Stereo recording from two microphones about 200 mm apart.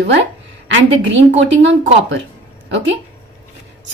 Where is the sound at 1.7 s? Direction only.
65° right (ahead or behind).